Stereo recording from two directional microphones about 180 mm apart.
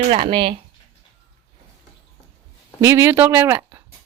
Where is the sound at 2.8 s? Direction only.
15° right (ahead or behind).